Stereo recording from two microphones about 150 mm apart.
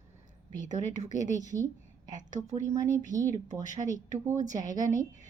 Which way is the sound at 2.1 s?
55° right (ahead or behind).